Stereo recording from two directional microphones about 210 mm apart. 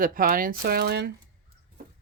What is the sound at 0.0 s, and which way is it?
Speech, 40° right (ahead or behind).